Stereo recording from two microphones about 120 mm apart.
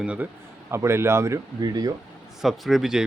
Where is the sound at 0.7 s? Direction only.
20° right (ahead or behind).